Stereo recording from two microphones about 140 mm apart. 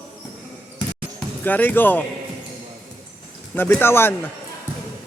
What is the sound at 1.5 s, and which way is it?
Speech, 15° left (ahead or behind).